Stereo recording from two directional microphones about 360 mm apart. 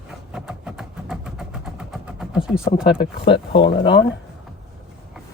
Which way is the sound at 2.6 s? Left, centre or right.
Centre.